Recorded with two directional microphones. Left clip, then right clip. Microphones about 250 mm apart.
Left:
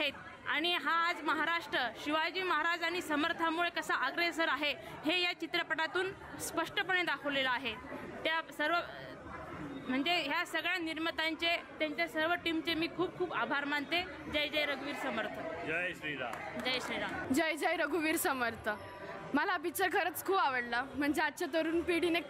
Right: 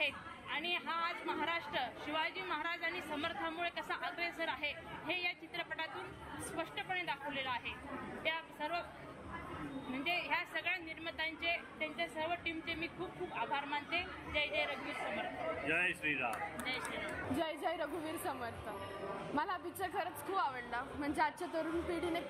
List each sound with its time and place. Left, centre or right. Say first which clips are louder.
0.0 s a woman's voice: left 2 dB; left
9.9 s a woman's voice: left 4 dB; left
15.7 s a man's voice: right 2 dB; centre
17.4 s a woman's voice: left 7 dB; left
19.3 s a woman's voice: left 7 dB; left
20.0 s a woman's voice: left 3 dB; left